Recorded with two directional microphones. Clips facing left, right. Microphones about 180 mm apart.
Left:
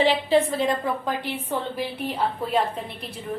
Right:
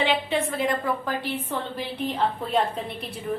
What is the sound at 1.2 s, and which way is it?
A woman's voice, 10° left (ahead or behind).